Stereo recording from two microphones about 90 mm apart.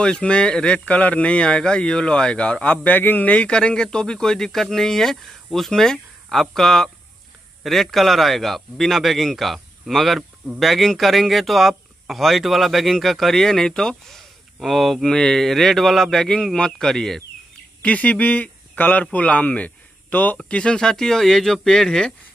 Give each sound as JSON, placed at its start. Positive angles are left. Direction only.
{"t": 0.0, "sound": "speech", "side_deg": 10}
{"t": 17.8, "sound": "speech", "side_deg": 15}